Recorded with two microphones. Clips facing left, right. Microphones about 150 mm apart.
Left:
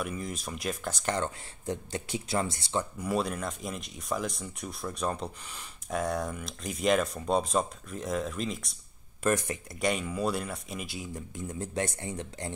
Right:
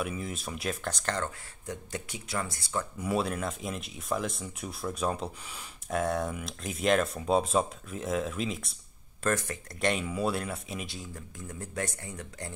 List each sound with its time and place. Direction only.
0.0 s speech: 5° right (ahead or behind)
1.0 s speech: 15° left (ahead or behind)
1.7 s speech: 30° left (ahead or behind)
3.0 s speech: centre (ahead or behind)
9.2 s speech: 15° left (ahead or behind)
9.8 s speech: centre (ahead or behind)
11.1 s speech: 20° left (ahead or behind)